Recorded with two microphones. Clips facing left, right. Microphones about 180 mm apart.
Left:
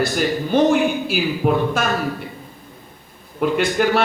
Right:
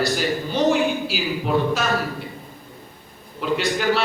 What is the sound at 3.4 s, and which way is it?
Speech, 55° left (ahead or behind).